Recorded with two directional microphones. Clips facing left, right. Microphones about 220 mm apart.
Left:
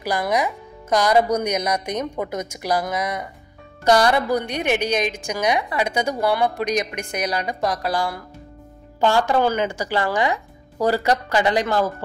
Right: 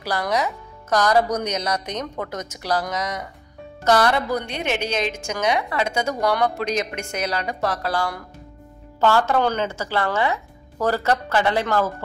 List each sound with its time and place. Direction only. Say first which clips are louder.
0.0 s a woman's voice: left 2 dB; 15° left (ahead or behind)